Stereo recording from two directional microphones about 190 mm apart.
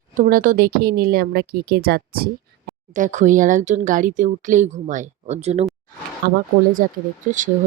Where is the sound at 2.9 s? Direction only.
40° right (ahead or behind).